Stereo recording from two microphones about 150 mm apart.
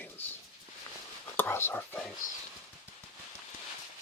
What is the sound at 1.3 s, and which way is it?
Speech, 15° left (ahead or behind).